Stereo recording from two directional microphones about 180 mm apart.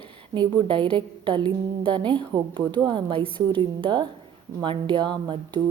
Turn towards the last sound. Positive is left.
turn(degrees=-25)  # may be behind; listen again after turning